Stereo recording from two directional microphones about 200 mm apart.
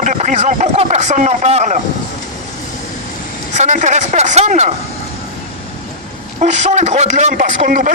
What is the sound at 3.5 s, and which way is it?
A man's voice, 35° right (ahead or behind).